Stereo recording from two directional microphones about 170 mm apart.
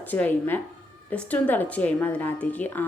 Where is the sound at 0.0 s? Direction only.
10° left (ahead or behind).